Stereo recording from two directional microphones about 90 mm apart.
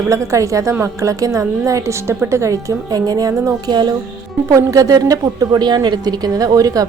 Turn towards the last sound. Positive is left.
turn(degrees=-40)  # may be behind; listen again after turning